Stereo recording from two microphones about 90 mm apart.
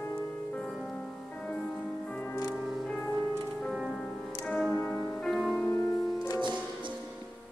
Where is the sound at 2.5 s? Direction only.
5° left (ahead or behind).